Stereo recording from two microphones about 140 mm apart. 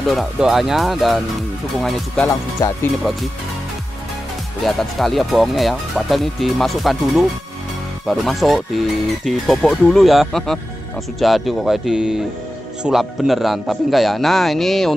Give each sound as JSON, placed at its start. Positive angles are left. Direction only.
{"t": 0.1, "sound": "speech", "side_deg": 0}
{"t": 2.2, "sound": "speech", "side_deg": 20}
{"t": 3.0, "sound": "speech", "side_deg": 0}
{"t": 4.6, "sound": "speech", "side_deg": 0}